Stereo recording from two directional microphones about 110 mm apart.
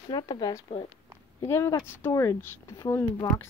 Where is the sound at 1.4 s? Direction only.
20° left (ahead or behind).